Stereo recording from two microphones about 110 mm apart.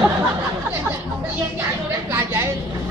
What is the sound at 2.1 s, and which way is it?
Speech, 20° right (ahead or behind).